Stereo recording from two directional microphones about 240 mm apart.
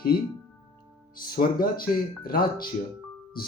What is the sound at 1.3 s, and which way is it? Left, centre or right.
Speech, left.